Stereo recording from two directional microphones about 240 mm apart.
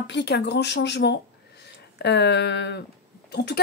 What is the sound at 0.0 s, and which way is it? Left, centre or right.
Speech, left.